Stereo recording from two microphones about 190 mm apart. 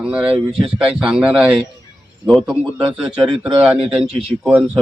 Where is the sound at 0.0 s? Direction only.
5° right (ahead or behind).